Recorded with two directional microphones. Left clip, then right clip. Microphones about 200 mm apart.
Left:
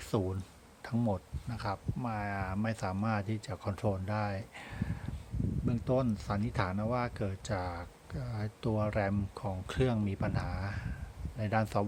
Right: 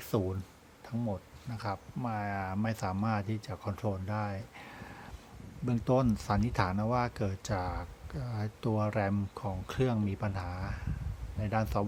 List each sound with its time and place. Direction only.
0.0 s speech: 5° left (ahead or behind)
0.9 s speech: 20° left (ahead or behind)
1.5 s speech: 5° left (ahead or behind)
5.6 s speech: 15° right (ahead or behind); by 11.9 s centre (ahead or behind)